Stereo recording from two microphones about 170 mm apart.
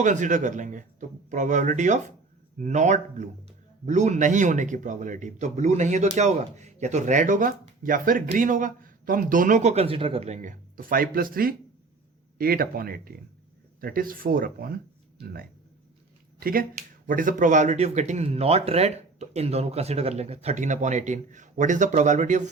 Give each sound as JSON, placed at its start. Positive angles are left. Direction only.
{"t": 0.0, "sound": "speech", "side_deg": -45}